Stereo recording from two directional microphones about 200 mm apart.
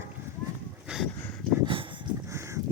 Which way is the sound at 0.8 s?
5° right (ahead or behind).